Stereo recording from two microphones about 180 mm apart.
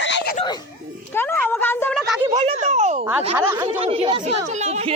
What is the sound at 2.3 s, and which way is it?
Speech, 35° right (ahead or behind).